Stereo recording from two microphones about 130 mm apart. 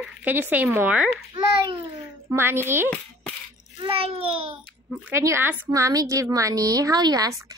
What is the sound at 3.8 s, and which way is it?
Speech, 45° right (ahead or behind).